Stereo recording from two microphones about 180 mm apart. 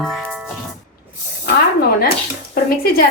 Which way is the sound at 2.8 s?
55° left (ahead or behind).